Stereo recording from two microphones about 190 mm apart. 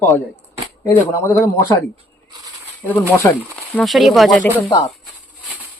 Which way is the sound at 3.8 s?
Centre (ahead or behind).